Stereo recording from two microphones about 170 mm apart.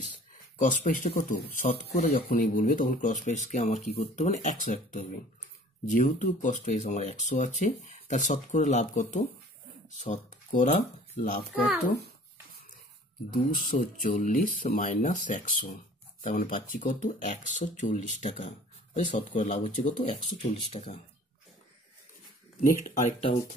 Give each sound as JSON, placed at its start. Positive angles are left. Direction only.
{"t": 0.6, "sound": "speech", "side_deg": 50}
{"t": 2.0, "sound": "speech", "side_deg": 40}
{"t": 2.3, "sound": "speech", "side_deg": 55}
{"t": 13.3, "sound": "speech", "side_deg": 55}
{"t": 22.6, "sound": "speech", "side_deg": 50}